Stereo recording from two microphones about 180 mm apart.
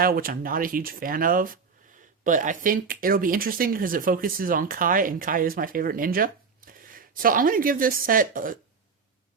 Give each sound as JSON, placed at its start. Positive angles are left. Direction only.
{"t": 0.0, "sound": "speech", "side_deg": -55}